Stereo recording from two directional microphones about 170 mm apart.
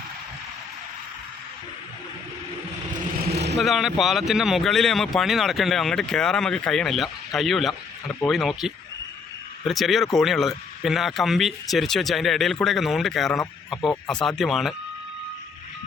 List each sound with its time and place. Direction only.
3.3 s vehicle: 80° right
3.6 s speech: centre (ahead or behind)